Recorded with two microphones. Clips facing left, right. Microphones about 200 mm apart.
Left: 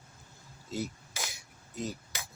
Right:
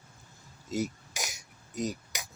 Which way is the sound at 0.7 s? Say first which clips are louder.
Right 4 dB; 15° right (ahead or behind).